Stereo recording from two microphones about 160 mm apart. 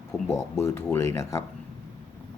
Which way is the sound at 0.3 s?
15° left (ahead or behind).